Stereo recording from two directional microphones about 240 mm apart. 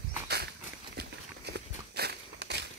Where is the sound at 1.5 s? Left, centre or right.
Right.